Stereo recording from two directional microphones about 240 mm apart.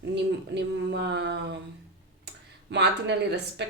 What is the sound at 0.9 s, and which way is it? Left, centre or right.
Speech, right.